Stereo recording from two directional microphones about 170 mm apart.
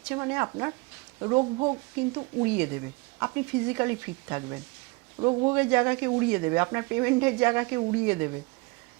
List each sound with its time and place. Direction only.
0.1 s speech: 15° right (ahead or behind)
2.6 s speech: 20° right (ahead or behind)
5.5 s speech: 15° right (ahead or behind)